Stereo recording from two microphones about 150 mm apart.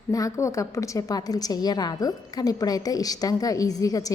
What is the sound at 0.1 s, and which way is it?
A woman's voice, 20° left (ahead or behind).